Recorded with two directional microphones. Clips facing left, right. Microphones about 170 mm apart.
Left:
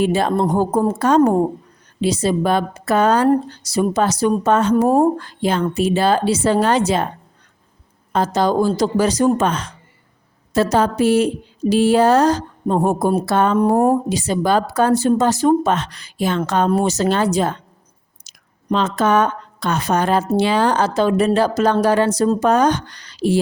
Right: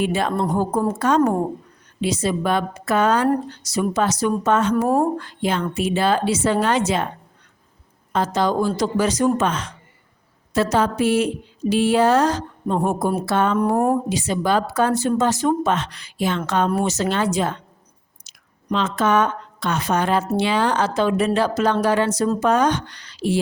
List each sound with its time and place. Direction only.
0.0 s speech: 35° left (ahead or behind)
8.1 s speech: 40° left (ahead or behind)